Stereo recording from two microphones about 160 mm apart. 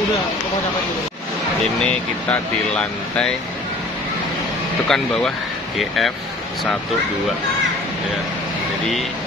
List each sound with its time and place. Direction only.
2.7 s speech: 5° left (ahead or behind)
4.8 s speech: 5° left (ahead or behind)